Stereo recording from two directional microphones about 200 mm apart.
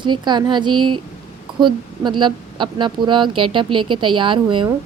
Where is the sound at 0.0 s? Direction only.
20° right (ahead or behind).